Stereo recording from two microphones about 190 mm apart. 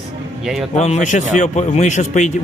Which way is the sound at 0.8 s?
40° left (ahead or behind).